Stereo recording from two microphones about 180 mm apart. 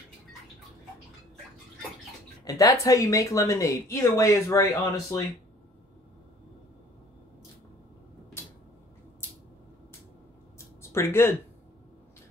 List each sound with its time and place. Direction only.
2.4 s speech: 20° left (ahead or behind)
10.8 s speech: 15° left (ahead or behind)